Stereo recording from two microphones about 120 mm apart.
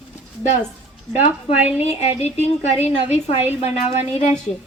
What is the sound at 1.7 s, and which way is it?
A woman's voice, 60° left (ahead or behind).